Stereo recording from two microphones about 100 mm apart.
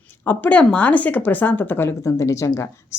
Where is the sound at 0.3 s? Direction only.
15° left (ahead or behind).